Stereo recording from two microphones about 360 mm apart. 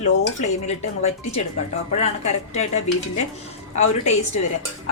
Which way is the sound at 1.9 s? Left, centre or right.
Centre.